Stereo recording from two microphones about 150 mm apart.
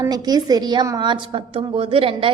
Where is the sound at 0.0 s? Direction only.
25° right (ahead or behind).